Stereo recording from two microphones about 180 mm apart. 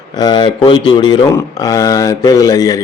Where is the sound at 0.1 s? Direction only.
25° left (ahead or behind).